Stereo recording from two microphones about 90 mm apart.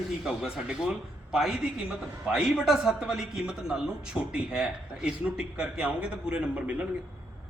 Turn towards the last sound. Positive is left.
turn(degrees=-15)  # may be behind; listen again after turning